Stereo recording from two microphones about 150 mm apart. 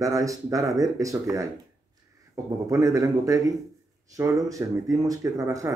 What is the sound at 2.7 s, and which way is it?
Speech, 20° right (ahead or behind).